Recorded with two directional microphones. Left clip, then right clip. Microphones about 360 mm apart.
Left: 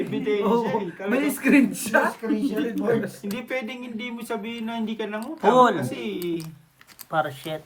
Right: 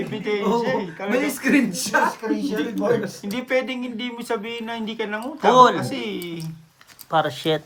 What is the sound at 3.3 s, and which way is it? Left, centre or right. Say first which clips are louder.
Speech: right 9 dB; right.